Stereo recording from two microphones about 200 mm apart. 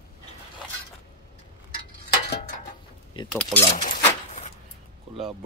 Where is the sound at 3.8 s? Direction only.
40° left (ahead or behind).